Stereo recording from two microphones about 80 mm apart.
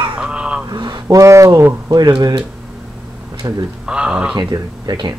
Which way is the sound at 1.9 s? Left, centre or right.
Right.